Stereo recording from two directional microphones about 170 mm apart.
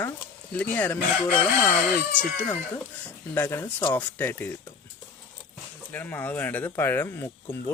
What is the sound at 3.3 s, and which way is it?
Speech, 15° left (ahead or behind).